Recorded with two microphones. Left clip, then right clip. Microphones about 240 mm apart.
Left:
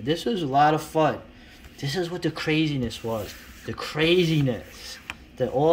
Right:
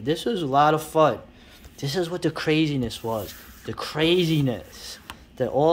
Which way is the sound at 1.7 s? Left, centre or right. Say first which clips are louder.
Right 2 dB; centre.